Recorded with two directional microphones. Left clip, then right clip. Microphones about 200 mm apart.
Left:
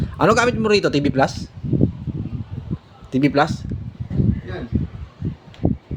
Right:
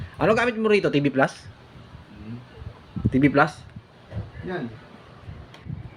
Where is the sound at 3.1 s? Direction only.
15° left (ahead or behind).